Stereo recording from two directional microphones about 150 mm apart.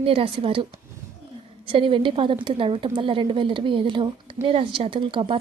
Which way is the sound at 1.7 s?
35° right (ahead or behind).